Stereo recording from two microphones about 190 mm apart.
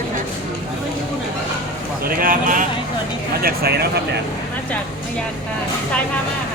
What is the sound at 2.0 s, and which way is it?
Speech, 50° right (ahead or behind).